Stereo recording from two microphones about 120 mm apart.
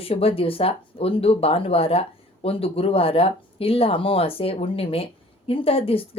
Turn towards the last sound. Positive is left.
turn(degrees=50)  # may be behind; listen again after turning